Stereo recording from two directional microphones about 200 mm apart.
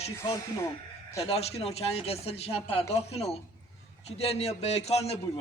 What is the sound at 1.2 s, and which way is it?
A man's voice, 30° left (ahead or behind).